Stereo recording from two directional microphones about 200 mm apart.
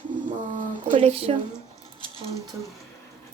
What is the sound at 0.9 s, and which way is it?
Speech, 30° right (ahead or behind).